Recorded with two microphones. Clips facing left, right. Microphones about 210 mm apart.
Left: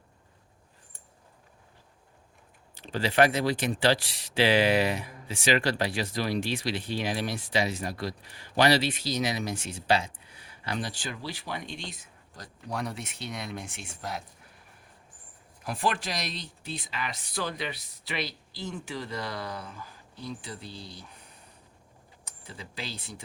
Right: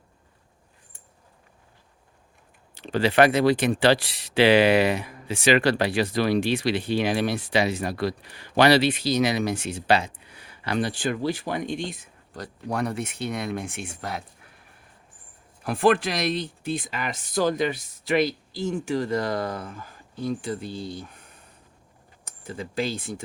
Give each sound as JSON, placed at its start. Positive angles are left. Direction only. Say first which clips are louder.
{"t": 2.7, "sound": "speech", "louder": "right 5 dB", "side_deg": -65}
{"t": 15.6, "sound": "speech", "louder": "right 10 dB", "side_deg": -60}
{"t": 22.2, "sound": "speech", "louder": "right 10 dB", "side_deg": -50}